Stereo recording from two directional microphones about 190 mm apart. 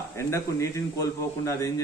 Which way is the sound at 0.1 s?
15° left (ahead or behind).